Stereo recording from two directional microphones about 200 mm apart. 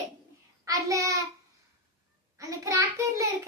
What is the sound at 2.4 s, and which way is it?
Child singing, 15° right (ahead or behind).